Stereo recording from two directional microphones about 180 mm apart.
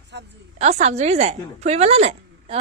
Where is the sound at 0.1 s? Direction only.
70° right (ahead or behind).